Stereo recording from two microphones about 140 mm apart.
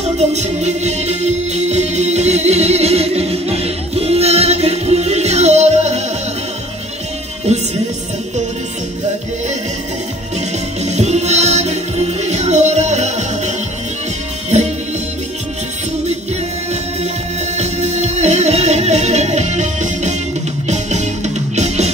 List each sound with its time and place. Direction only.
0.2 s music: 55° right (ahead or behind)
10.9 s music: 55° right (ahead or behind)
17.6 s music: 55° right (ahead or behind)